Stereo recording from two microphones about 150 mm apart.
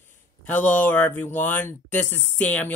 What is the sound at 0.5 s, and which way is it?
Speech, 10° left (ahead or behind).